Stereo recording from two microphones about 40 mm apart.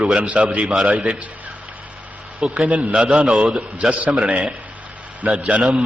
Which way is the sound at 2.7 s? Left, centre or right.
Right.